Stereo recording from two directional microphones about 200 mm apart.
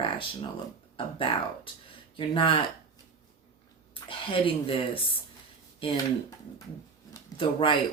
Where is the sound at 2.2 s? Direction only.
25° left (ahead or behind).